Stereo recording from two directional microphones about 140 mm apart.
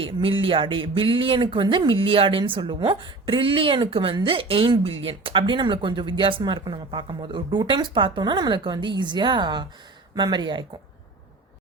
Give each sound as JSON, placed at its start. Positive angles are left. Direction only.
{"t": 0.0, "sound": "speech", "side_deg": -40}